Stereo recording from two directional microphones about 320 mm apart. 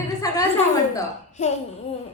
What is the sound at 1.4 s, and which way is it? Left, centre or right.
Speech, left.